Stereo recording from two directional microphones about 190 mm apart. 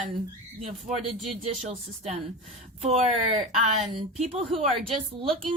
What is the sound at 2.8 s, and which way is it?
A woman's voice, 35° right (ahead or behind).